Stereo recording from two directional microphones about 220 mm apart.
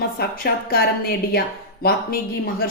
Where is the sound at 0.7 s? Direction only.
45° left (ahead or behind).